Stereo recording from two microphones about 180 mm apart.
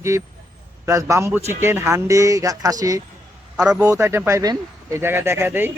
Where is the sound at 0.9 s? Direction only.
15° right (ahead or behind).